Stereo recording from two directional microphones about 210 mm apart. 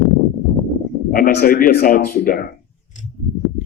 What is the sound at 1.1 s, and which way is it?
Speech, 45° left (ahead or behind).